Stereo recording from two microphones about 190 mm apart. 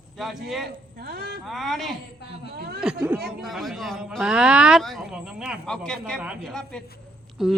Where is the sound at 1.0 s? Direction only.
55° right (ahead or behind).